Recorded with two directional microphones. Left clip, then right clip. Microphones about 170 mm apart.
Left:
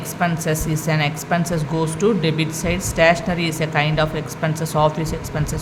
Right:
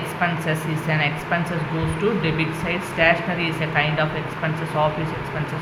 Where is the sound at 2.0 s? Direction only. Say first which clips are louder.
Left 2 dB; 85° left.